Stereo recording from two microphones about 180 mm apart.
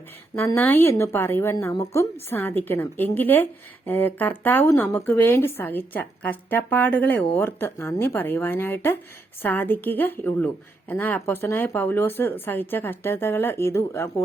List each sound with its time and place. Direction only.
0.3 s a woman's voice: 10° left (ahead or behind)